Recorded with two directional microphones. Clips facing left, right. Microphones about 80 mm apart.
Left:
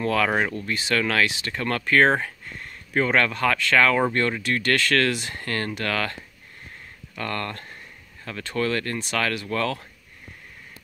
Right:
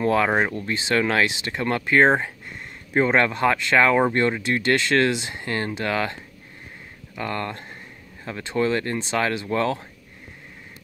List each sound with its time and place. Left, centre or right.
0.0 s speech: right
7.2 s speech: centre